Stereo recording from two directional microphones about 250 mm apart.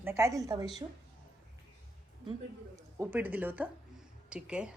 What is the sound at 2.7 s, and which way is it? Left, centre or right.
A woman's voice, centre.